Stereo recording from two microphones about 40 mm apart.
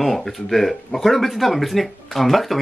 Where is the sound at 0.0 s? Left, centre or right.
Centre.